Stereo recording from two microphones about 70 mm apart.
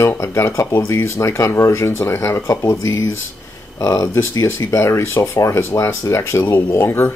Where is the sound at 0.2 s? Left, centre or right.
Left.